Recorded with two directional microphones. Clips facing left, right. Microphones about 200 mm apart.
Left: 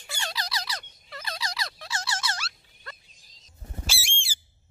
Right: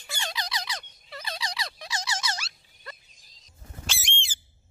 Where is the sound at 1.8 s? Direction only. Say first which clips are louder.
Even; 15° right (ahead or behind).